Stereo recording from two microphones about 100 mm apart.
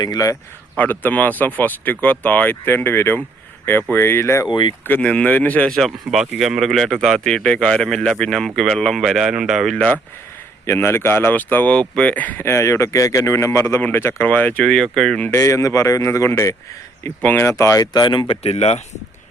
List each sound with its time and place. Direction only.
0.0 s speech: 40° left (ahead or behind)
0.8 s speech: 15° left (ahead or behind)
4.4 s speech: 50° left (ahead or behind)
4.8 s speech: 15° left (ahead or behind)
5.7 s speech: centre (ahead or behind)
9.7 s speech: 15° left (ahead or behind)
10.7 s speech: 25° left (ahead or behind)
14.6 s speech: 5° left (ahead or behind)
15.2 s speech: 25° left (ahead or behind); by 18.3 s 50° left (ahead or behind)
18.4 s speech: 90° left